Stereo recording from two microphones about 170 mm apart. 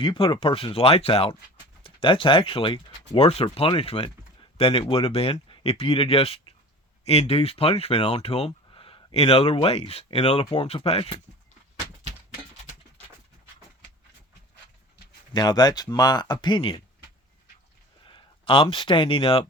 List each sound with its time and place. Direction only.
0.0 s speech: 30° left (ahead or behind)
15.3 s speech: 25° left (ahead or behind)
18.0 s speech: 30° left (ahead or behind)